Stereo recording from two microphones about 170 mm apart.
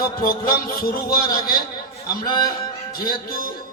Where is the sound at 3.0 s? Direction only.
60° left (ahead or behind).